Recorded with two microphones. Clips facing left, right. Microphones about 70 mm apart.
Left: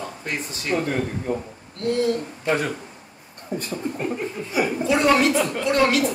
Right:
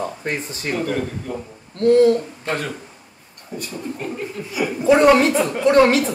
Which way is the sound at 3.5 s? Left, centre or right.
Left.